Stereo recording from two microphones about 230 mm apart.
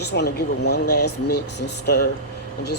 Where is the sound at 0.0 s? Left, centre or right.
Left.